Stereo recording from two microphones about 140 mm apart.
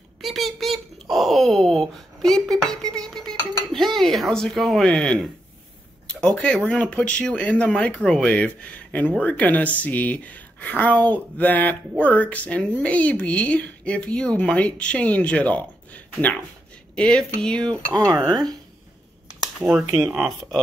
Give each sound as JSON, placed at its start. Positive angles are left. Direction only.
{"t": 0.2, "sound": "wail", "side_deg": 0}
{"t": 2.5, "sound": "a sound", "side_deg": 5}
{"t": 6.0, "sound": "speech", "side_deg": 5}
{"t": 17.6, "sound": "speech", "side_deg": -30}
{"t": 19.6, "sound": "speech", "side_deg": 0}